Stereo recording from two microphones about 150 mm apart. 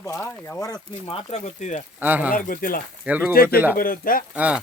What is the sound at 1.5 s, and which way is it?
Speech, 55° left (ahead or behind).